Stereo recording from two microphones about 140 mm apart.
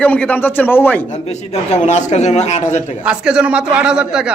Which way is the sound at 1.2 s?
55° left (ahead or behind).